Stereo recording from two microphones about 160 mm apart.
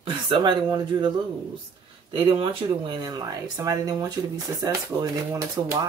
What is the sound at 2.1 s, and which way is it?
Speech, 30° right (ahead or behind).